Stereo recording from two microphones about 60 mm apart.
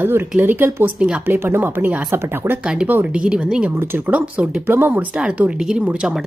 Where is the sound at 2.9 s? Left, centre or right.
Right.